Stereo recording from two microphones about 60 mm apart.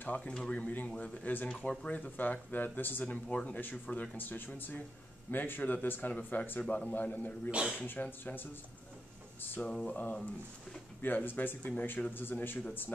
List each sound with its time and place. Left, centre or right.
0.0 s speech: left
3.3 s speech: centre
6.6 s a sound: centre
6.9 s speech: left
7.5 s speech: centre
7.8 s speech: left
9.6 s a sound: centre
11.0 s speech: left